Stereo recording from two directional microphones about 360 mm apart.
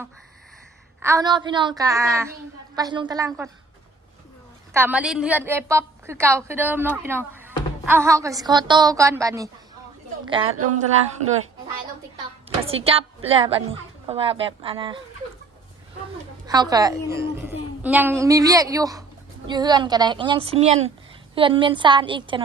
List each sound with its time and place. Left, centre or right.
0.9 s a woman's voice: centre
4.7 s a woman's voice: centre
12.6 s a woman's voice: centre
16.5 s a woman's voice: centre